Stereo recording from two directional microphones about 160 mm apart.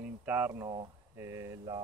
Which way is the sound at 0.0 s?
10° right (ahead or behind).